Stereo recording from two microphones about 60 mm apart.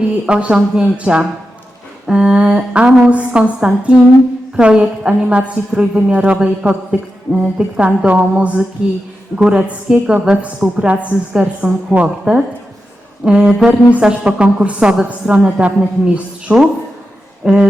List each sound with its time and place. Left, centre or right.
0.3 s a woman's voice: centre